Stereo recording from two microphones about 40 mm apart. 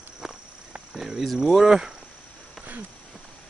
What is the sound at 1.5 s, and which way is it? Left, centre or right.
Speech, centre.